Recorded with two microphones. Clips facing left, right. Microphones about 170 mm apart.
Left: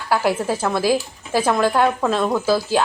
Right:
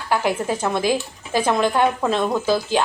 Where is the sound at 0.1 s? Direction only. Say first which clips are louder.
Left 2 dB; 5° left (ahead or behind).